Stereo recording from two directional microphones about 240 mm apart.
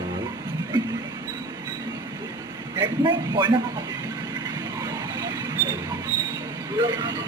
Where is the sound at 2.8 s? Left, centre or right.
Centre.